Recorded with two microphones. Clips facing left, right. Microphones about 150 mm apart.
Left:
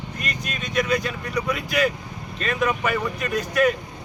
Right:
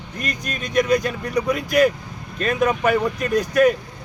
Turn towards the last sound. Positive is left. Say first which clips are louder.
# right 4 dB
turn(degrees=-40)  # may be behind; listen again after turning